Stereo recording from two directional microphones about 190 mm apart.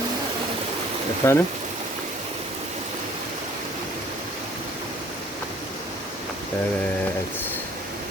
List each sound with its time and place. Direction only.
1.2 s speech: 15° left (ahead or behind)